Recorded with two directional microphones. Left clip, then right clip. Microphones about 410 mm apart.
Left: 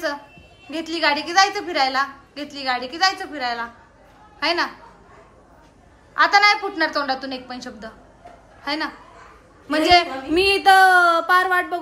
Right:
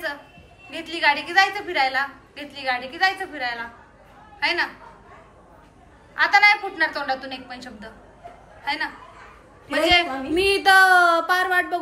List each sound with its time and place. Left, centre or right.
0.7 s a woman's voice: centre
6.1 s a woman's voice: centre
9.7 s a sound: centre